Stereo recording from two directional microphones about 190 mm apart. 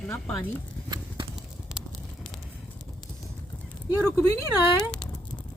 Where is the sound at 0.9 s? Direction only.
25° right (ahead or behind).